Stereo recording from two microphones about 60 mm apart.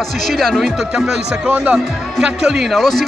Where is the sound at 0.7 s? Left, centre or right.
Centre.